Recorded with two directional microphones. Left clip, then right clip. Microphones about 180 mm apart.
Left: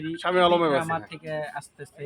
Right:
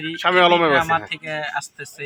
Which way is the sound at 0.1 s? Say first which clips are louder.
Right 6 dB; 35° right (ahead or behind).